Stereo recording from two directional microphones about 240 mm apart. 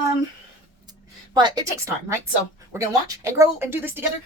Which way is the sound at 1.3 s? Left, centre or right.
Centre.